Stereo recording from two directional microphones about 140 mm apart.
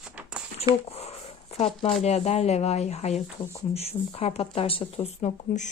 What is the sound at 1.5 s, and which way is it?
Speech, 45° left (ahead or behind).